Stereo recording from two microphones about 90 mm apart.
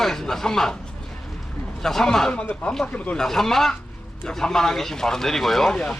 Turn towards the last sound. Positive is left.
turn(degrees=10)  # may be behind; listen again after turning